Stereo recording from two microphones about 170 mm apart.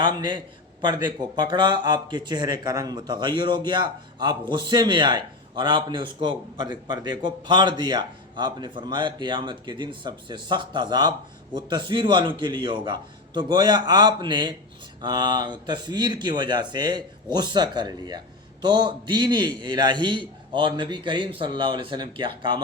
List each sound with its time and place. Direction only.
0.0 s a man's voice: 25° right (ahead or behind)